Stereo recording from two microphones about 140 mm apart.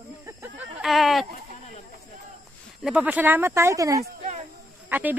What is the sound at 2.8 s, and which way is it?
Speech, 10° right (ahead or behind).